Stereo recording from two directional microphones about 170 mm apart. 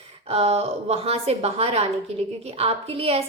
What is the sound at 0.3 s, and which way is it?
A woman's voice, 35° right (ahead or behind).